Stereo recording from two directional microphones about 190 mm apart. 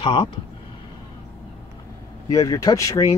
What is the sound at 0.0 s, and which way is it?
Speech, 25° left (ahead or behind).